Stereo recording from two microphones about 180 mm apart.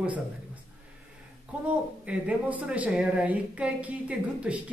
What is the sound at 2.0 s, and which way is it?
A woman's voice, 10° right (ahead or behind).